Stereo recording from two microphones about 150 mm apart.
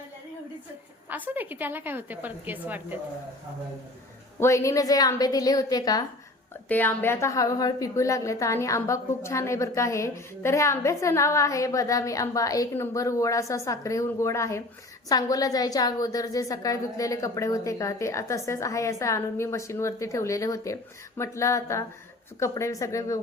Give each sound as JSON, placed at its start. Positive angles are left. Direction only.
{"t": 1.1, "sound": "a woman's voice", "side_deg": -10}
{"t": 4.4, "sound": "a woman's voice", "side_deg": 20}
{"t": 6.7, "sound": "a woman's voice", "side_deg": 10}